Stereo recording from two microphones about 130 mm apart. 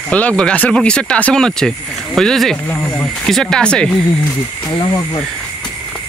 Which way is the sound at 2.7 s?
15° left (ahead or behind).